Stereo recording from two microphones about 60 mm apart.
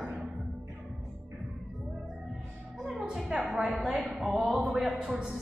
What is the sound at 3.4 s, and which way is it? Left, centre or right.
Speech, centre.